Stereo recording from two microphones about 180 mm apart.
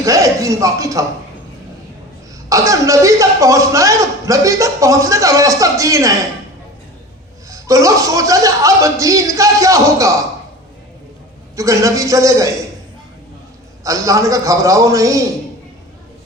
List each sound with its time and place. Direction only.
0.0 s a man's voice: 15° right (ahead or behind)
2.5 s a man's voice: 20° right (ahead or behind)
7.5 s a man's voice: 20° right (ahead or behind)
11.5 s a man's voice: 20° right (ahead or behind)
13.8 s a man's voice: 20° right (ahead or behind)